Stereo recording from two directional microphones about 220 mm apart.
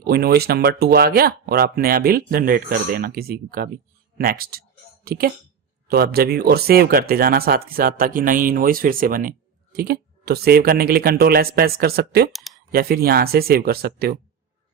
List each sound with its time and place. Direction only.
0.0 s speech: 45° right (ahead or behind)
12.3 s a sound: centre (ahead or behind)
12.7 s speech: 45° right (ahead or behind)